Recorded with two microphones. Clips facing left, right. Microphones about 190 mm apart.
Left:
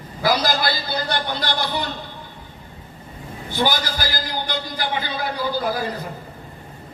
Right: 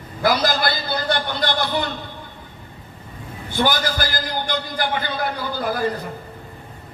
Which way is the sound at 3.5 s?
50° right (ahead or behind).